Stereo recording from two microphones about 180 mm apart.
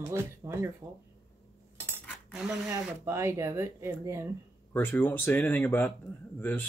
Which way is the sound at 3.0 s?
15° right (ahead or behind).